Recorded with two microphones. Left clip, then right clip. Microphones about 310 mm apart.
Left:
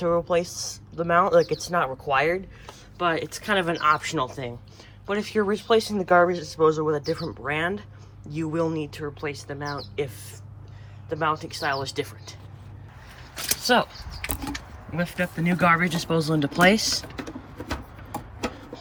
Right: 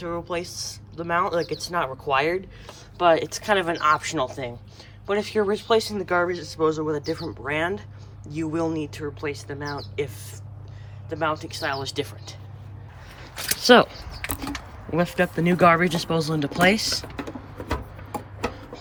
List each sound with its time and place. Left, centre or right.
0.0 s speech: centre
11.1 s speech: centre
13.6 s speech: right
14.9 s speech: centre